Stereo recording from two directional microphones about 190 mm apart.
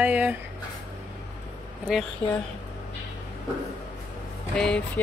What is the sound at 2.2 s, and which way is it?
Speech, 30° left (ahead or behind).